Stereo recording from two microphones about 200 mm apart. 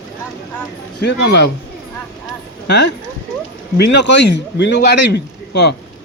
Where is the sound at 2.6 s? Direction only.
60° left (ahead or behind).